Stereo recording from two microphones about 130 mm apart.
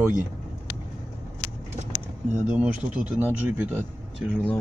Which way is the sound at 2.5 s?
10° right (ahead or behind).